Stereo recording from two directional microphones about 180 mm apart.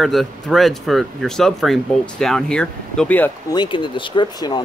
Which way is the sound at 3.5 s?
25° left (ahead or behind).